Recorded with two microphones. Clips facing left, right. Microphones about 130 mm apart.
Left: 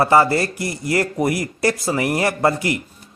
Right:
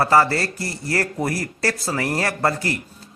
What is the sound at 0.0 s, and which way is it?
Speech, 20° left (ahead or behind).